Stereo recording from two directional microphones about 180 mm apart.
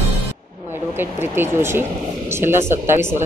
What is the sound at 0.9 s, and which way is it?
A man's voice, 10° right (ahead or behind).